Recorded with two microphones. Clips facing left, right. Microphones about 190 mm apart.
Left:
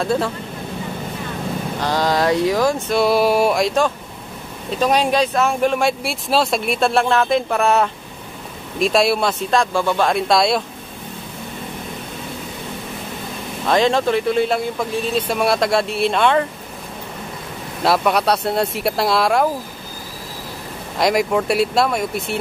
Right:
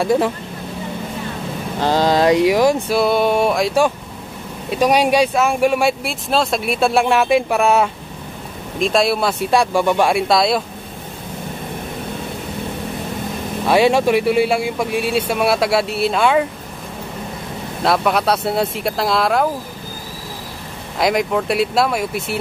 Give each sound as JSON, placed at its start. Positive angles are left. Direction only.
{"t": 0.0, "sound": "speech", "side_deg": -15}
{"t": 1.9, "sound": "speech", "side_deg": -25}
{"t": 2.9, "sound": "speech", "side_deg": 0}
{"t": 9.5, "sound": "speech", "side_deg": -10}
{"t": 13.7, "sound": "speech", "side_deg": -10}
{"t": 17.8, "sound": "speech", "side_deg": 0}
{"t": 21.0, "sound": "speech", "side_deg": 0}